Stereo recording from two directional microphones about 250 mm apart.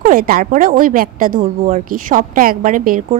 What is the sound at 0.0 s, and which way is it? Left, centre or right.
A woman's voice, right.